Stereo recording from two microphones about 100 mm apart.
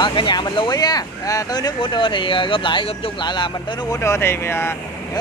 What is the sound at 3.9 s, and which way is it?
Speech, 25° left (ahead or behind).